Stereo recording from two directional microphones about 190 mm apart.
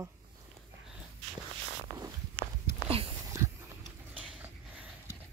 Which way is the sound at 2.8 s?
30° right (ahead or behind).